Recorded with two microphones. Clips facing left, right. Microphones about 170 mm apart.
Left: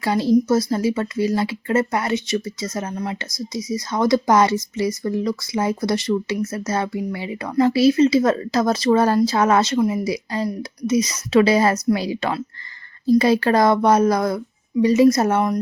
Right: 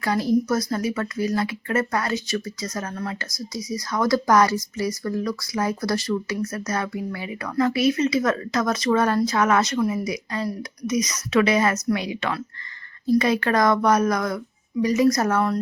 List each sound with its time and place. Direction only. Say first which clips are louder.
0.0 s speech: left 4 dB; 25° left (ahead or behind)